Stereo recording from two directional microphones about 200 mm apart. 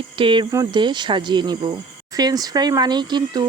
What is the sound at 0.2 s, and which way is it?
Speech, 25° right (ahead or behind).